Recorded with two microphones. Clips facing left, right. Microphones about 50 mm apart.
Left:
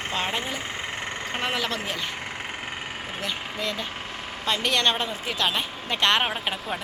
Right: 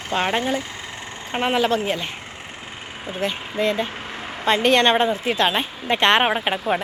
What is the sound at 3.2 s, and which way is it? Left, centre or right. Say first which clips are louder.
A woman's voice: right 9 dB; right.